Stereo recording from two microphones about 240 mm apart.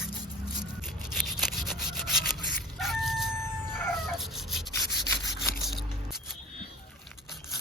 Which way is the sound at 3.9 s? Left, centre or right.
Centre.